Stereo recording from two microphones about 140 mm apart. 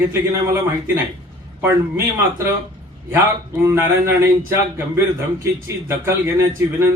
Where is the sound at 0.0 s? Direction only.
20° right (ahead or behind).